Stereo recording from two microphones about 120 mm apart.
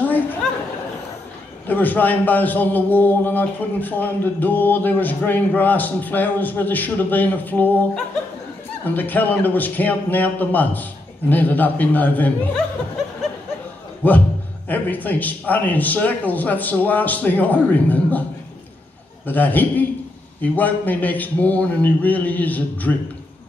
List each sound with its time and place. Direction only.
0.0 s chatter: 15° left (ahead or behind)
1.7 s a man's voice: 15° left (ahead or behind)
14.0 s a man's voice: 15° left (ahead or behind)
19.2 s a man's voice: 15° left (ahead or behind)